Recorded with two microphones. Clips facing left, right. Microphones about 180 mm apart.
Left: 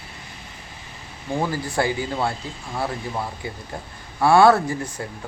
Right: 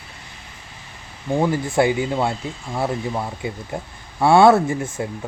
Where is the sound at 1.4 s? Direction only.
20° right (ahead or behind).